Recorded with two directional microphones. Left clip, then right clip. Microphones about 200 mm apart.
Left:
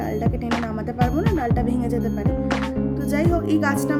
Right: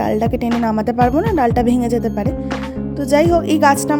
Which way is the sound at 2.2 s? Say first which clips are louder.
Right 2 dB; centre (ahead or behind).